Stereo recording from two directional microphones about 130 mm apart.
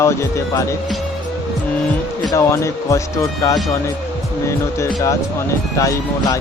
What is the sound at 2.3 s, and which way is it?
Speech, 25° left (ahead or behind).